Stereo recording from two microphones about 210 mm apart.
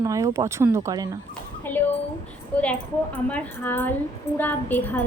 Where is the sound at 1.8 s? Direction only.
10° left (ahead or behind).